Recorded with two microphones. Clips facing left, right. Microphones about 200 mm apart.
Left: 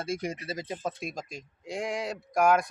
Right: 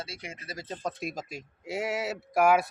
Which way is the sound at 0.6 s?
5° left (ahead or behind).